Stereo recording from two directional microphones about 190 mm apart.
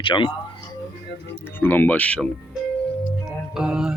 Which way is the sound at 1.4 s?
10° left (ahead or behind).